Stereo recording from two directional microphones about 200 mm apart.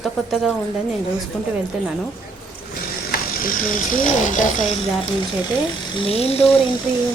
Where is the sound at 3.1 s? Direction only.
50° left (ahead or behind).